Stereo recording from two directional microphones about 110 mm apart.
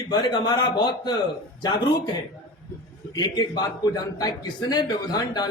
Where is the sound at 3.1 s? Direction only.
40° left (ahead or behind).